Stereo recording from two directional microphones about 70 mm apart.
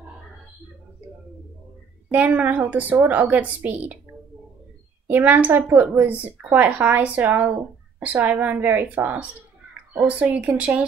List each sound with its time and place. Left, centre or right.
2.0 s speech: right
5.0 s speech: right